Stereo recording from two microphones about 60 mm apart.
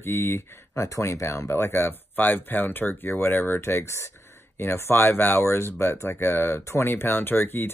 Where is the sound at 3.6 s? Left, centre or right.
Left.